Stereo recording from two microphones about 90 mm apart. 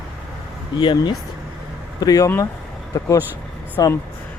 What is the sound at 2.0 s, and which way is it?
Speech, 45° left (ahead or behind).